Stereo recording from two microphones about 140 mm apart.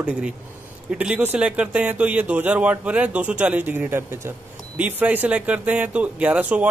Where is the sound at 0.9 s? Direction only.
10° right (ahead or behind).